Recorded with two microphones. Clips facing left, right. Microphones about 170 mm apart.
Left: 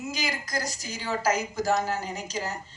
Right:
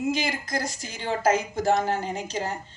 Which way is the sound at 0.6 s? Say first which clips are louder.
Right 2 dB; 55° right (ahead or behind).